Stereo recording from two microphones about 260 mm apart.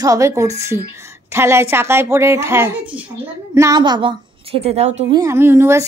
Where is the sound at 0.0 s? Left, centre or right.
Centre.